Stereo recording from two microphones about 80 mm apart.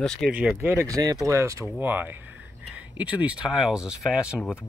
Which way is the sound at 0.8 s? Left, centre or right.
Right.